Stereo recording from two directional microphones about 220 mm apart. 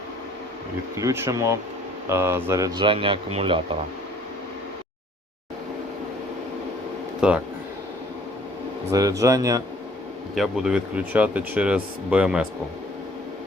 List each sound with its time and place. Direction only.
0.9 s speech: 10° right (ahead or behind)
7.2 s speech: 5° right (ahead or behind)
8.9 s speech: 15° right (ahead or behind)
10.3 s speech: centre (ahead or behind)